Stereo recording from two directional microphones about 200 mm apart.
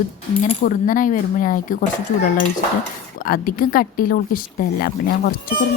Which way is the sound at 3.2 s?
45° left (ahead or behind).